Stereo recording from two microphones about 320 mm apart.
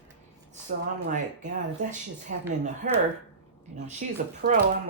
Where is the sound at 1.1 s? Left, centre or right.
Right.